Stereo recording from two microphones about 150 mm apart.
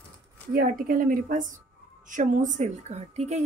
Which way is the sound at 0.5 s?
70° right (ahead or behind).